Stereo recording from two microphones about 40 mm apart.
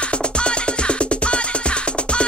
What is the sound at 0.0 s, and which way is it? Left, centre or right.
Music, left.